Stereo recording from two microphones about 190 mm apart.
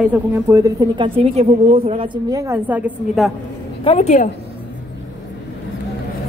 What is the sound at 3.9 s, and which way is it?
Speech, 35° left (ahead or behind).